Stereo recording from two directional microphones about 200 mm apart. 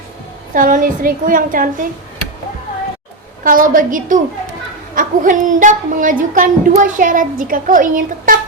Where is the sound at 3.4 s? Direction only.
40° right (ahead or behind).